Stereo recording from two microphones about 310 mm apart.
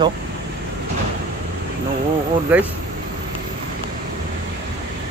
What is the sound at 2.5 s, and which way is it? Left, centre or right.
Speech, centre.